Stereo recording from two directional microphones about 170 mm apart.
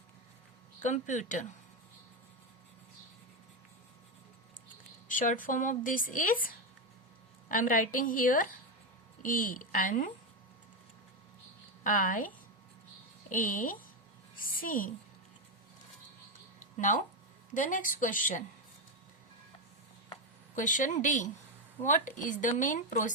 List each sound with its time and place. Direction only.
0.8 s speech: 45° left (ahead or behind)
5.0 s speech: 50° left (ahead or behind)
11.8 s speech: 55° left (ahead or behind)
13.3 s a woman's voice: 55° left (ahead or behind)
16.6 s a sound: 50° left (ahead or behind)
17.5 s speech: 50° left (ahead or behind)
20.6 s speech: 50° left (ahead or behind)